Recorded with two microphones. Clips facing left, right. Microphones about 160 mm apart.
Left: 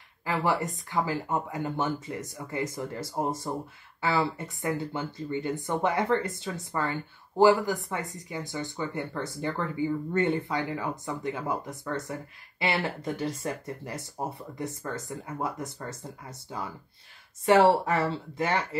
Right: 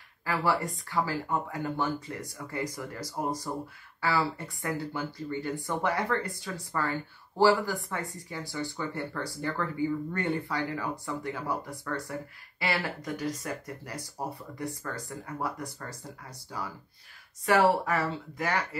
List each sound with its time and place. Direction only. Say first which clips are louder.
0.2 s speech: left 1 dB; 20° left (ahead or behind)